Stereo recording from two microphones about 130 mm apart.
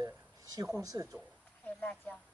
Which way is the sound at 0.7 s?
25° right (ahead or behind).